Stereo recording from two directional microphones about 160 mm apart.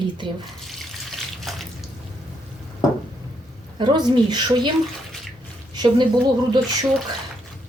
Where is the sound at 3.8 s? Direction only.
30° right (ahead or behind).